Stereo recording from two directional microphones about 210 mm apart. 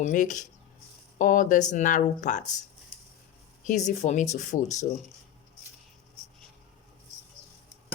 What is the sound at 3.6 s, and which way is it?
Speech, 35° left (ahead or behind).